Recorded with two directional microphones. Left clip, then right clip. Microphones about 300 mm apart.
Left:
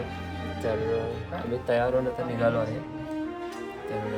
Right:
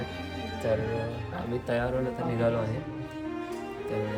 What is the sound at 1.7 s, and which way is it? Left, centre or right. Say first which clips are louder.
Speech: left 5 dB; centre.